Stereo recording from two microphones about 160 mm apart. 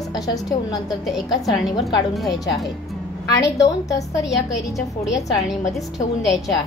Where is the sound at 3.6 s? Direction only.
20° left (ahead or behind).